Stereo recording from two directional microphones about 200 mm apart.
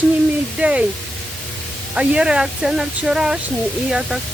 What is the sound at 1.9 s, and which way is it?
Speech, 5° right (ahead or behind).